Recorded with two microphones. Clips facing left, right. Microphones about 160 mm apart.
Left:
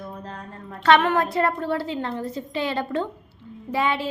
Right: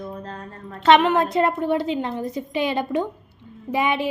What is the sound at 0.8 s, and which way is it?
A woman's voice, 20° right (ahead or behind).